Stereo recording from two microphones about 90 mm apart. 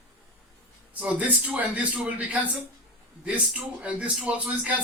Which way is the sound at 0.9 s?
15° right (ahead or behind).